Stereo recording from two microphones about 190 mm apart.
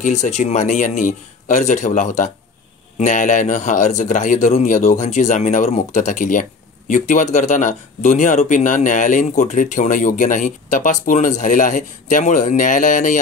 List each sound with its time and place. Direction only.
0.0 s speech: 35° left (ahead or behind)